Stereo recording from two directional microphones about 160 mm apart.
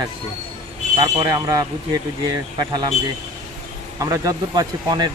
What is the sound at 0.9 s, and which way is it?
Speech, 25° right (ahead or behind).